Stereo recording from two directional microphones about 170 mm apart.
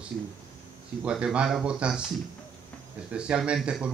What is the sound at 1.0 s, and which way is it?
Speech, 5° right (ahead or behind).